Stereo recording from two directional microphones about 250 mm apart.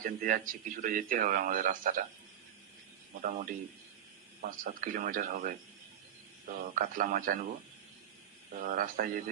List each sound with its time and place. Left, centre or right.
0.0 s speech: right
3.2 s speech: right
6.6 s speech: right
8.6 s speech: right